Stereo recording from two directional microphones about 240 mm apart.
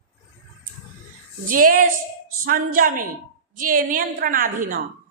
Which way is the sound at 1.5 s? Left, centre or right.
Right.